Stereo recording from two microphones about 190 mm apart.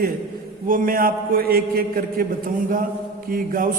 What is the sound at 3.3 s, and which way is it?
Speech, 45° right (ahead or behind).